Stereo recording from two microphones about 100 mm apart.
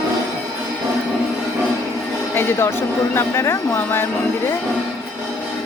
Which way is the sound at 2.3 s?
20° left (ahead or behind).